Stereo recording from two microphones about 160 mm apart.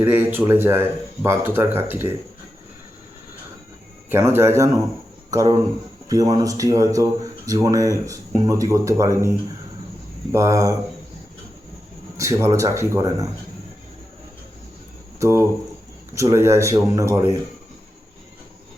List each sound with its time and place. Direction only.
0.0 s speech: 10° right (ahead or behind)
4.1 s speech: 15° right (ahead or behind)
10.3 s speech: 20° right (ahead or behind)
12.1 s speech: 20° right (ahead or behind)
15.2 s speech: 20° right (ahead or behind)